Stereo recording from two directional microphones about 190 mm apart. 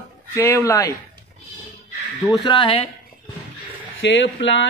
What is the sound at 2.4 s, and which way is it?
Speech, 25° left (ahead or behind).